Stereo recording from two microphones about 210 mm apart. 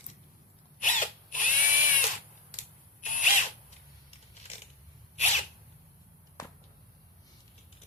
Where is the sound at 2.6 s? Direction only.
40° left (ahead or behind).